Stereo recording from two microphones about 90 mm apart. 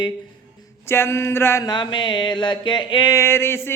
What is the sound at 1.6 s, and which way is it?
Mantra, 55° left (ahead or behind).